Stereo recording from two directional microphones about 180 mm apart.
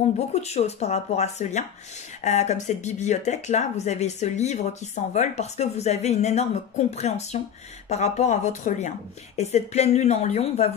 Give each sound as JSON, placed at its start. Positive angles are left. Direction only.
{"t": 0.3, "sound": "speech", "side_deg": 35}